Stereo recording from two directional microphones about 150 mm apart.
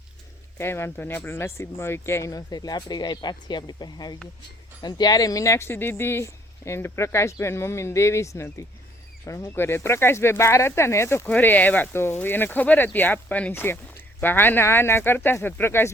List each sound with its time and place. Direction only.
0.6 s speech: 15° left (ahead or behind)